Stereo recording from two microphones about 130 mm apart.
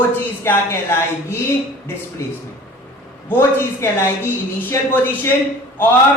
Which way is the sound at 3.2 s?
20° left (ahead or behind).